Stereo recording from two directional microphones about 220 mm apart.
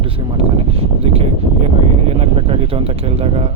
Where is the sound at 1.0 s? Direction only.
25° right (ahead or behind).